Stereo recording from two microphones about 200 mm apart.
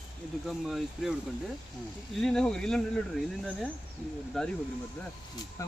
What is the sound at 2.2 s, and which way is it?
Speech, 5° left (ahead or behind).